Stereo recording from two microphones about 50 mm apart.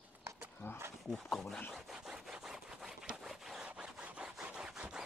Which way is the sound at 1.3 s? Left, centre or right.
Centre.